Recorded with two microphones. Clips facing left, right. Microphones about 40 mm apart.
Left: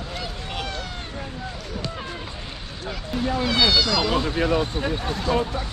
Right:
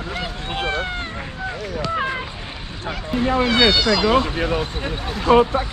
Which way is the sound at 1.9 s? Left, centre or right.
Right.